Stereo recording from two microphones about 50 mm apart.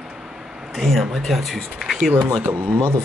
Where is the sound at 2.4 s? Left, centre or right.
Right.